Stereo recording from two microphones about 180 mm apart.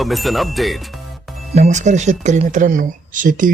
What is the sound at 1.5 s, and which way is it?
Speech, 40° right (ahead or behind).